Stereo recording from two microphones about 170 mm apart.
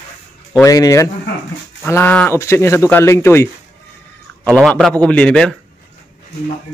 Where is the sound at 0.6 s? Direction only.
20° left (ahead or behind).